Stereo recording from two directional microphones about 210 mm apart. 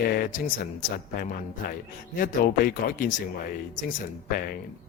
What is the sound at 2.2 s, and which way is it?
Speech, 40° left (ahead or behind).